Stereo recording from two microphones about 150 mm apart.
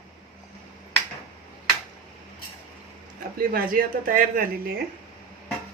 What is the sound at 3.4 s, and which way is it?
Speech, 70° right (ahead or behind).